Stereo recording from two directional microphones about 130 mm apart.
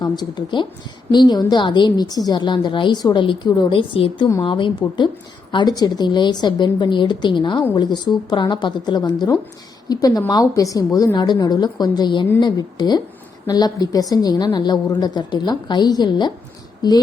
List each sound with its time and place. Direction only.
0.0 s a woman's voice: 35° left (ahead or behind)